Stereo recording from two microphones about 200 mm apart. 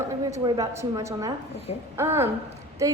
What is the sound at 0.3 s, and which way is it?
A woman's voice, 20° right (ahead or behind).